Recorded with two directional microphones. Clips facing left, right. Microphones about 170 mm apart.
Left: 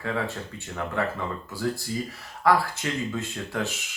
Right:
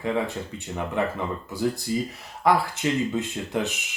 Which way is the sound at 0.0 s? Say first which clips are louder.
Right 3 dB; 15° right (ahead or behind).